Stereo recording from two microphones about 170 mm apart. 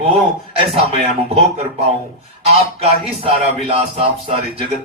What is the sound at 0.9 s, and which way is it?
Music, 35° right (ahead or behind).